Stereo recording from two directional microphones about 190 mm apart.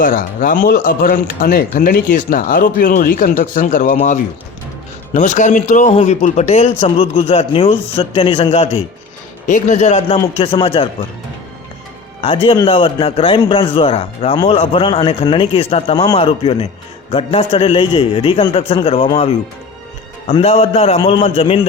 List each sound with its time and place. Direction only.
0.0 s a man's voice: 45° left (ahead or behind); by 10.8 s 30° left (ahead or behind)
12.2 s a man's voice: 30° left (ahead or behind)